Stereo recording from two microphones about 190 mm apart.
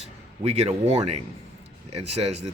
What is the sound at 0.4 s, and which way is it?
Speech, 35° right (ahead or behind).